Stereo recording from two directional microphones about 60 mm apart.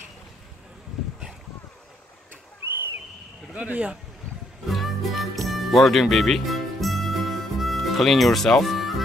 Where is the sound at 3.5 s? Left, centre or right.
Right.